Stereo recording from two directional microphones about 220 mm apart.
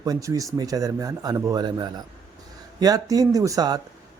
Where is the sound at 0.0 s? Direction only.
15° right (ahead or behind).